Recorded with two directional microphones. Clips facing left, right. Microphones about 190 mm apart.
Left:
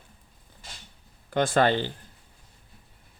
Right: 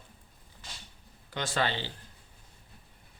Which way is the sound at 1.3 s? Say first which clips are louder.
Left 9 dB; 50° left (ahead or behind).